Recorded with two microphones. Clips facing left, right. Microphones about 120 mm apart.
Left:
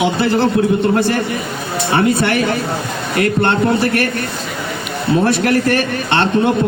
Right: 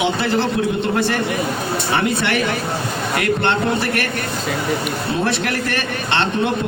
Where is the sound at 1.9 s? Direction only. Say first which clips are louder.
Left 6 dB; 35° left (ahead or behind).